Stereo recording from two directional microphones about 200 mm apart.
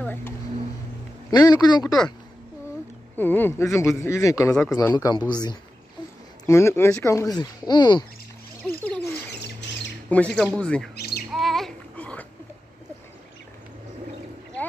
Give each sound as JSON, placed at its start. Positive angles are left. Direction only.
{"t": 0.0, "sound": "a sound", "side_deg": 10}
{"t": 1.3, "sound": "a man's voice", "side_deg": 20}
{"t": 3.2, "sound": "a man's voice", "side_deg": 10}
{"t": 8.6, "sound": "bird", "side_deg": 5}
{"t": 9.6, "sound": "squawk", "side_deg": 60}
{"t": 10.0, "sound": "speech", "side_deg": 5}
{"t": 11.0, "sound": "a sound", "side_deg": 50}
{"t": 11.3, "sound": "babbling", "side_deg": 0}